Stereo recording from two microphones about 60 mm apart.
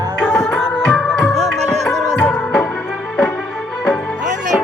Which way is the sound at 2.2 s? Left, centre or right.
Centre.